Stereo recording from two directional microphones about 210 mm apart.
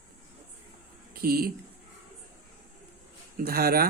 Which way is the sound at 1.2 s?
45° right (ahead or behind).